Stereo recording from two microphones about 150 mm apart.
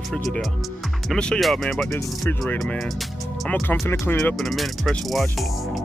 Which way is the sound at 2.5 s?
Centre (ahead or behind).